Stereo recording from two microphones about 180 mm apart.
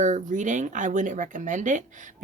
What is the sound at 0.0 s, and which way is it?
Speech, 45° right (ahead or behind).